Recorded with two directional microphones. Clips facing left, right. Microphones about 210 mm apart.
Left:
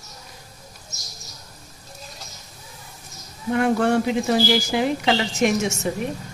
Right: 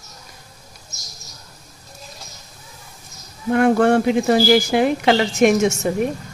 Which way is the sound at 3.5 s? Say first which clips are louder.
Right 5 dB; 55° right (ahead or behind).